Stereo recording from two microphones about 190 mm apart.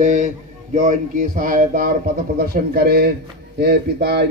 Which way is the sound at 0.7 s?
45° right (ahead or behind).